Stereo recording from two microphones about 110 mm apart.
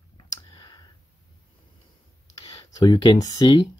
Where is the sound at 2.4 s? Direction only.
55° left (ahead or behind).